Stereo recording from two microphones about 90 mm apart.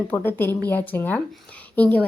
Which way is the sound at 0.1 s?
25° left (ahead or behind).